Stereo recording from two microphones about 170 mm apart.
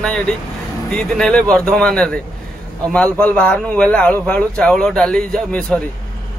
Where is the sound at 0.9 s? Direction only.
5° left (ahead or behind).